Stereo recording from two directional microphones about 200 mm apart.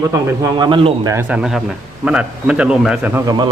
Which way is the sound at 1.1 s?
5° right (ahead or behind).